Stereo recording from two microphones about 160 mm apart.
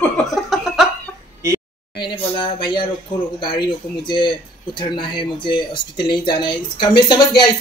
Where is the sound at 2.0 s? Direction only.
30° left (ahead or behind).